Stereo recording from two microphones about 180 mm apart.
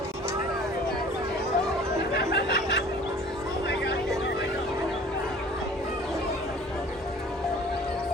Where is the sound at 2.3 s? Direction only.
70° left (ahead or behind).